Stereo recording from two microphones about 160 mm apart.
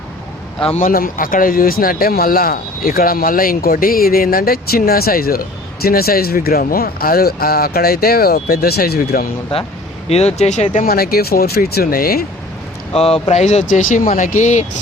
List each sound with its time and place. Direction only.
0.8 s speech: 60° left (ahead or behind)
10.1 s speech: 40° left (ahead or behind)
10.8 s speech: 70° left (ahead or behind)
12.9 s speech: 40° left (ahead or behind)